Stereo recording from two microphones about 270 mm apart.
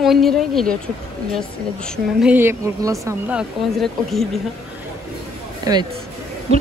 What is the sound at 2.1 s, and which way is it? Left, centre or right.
Speech, centre.